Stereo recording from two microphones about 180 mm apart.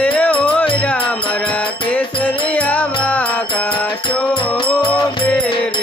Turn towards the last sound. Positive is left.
turn(degrees=5)  # may be behind; listen again after turning